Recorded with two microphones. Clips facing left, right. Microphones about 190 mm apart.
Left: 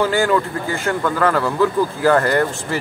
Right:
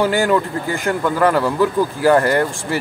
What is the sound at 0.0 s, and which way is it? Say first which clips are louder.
Speech: right 1 dB; 15° right (ahead or behind).